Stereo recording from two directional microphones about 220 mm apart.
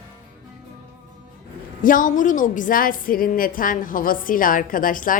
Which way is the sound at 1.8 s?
35° left (ahead or behind).